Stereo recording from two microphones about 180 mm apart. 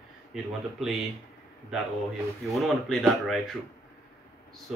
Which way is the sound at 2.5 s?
Centre (ahead or behind).